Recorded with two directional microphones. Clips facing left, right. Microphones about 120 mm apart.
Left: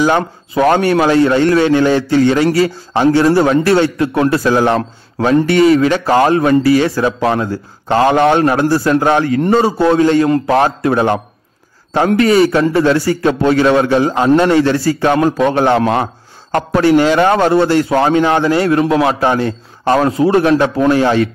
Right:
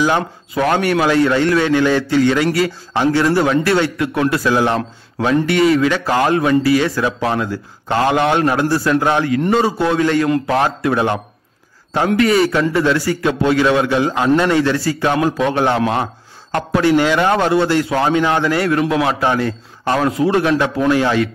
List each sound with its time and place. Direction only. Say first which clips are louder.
0.0 s a man's voice: left 3 dB; 35° left (ahead or behind)